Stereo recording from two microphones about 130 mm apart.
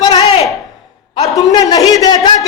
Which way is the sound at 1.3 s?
30° left (ahead or behind).